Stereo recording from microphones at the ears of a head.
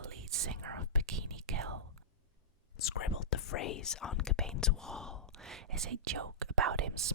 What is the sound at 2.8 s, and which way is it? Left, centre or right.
Speech, left.